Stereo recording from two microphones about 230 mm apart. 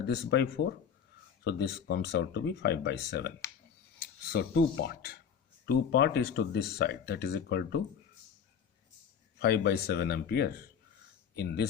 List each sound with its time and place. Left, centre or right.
0.0 s speech: left
9.4 s speech: left